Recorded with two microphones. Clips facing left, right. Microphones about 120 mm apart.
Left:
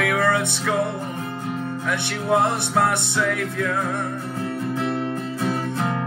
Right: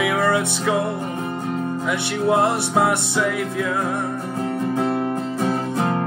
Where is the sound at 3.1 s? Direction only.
15° right (ahead or behind).